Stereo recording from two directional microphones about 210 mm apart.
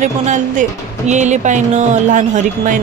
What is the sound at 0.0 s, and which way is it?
Speech, 35° right (ahead or behind).